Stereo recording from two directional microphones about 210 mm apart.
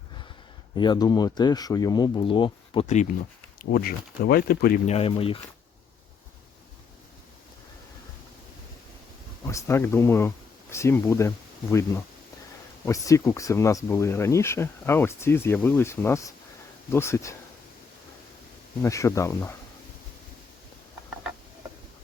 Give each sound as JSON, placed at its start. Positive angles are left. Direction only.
{"t": 0.8, "sound": "speech", "side_deg": 20}
{"t": 3.6, "sound": "speech", "side_deg": 45}
{"t": 4.9, "sound": "speech", "side_deg": 30}
{"t": 9.5, "sound": "speech", "side_deg": 15}
{"t": 18.8, "sound": "speech", "side_deg": 15}